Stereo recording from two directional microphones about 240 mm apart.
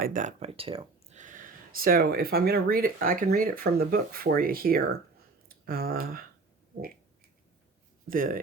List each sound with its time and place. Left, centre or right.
0.0 s speech: right
8.0 s speech: right